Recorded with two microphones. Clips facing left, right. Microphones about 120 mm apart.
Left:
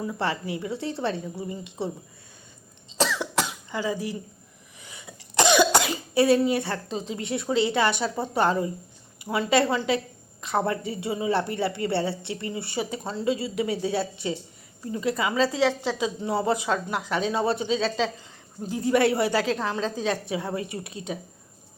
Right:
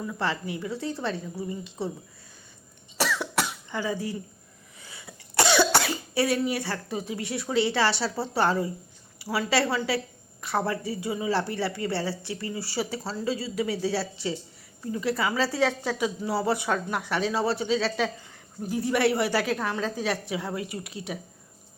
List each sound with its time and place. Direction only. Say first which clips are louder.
0.0 s a woman's voice: left 2 dB; 25° left (ahead or behind)
2.9 s cough: left 2 dB; 20° left (ahead or behind)
4.8 s a woman's voice: left 1 dB; 20° left (ahead or behind)